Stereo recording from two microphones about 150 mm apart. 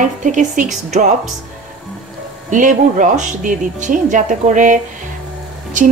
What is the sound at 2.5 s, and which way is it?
Speech, 60° right (ahead or behind).